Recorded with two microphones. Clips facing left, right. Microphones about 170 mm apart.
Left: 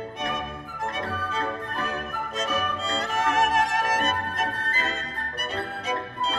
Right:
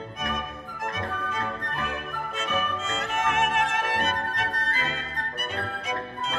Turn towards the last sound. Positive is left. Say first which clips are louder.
# left 3 dB
turn(degrees=35)  # may be behind; listen again after turning